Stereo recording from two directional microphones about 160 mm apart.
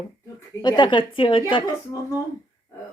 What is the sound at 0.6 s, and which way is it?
A woman's voice, 30° left (ahead or behind).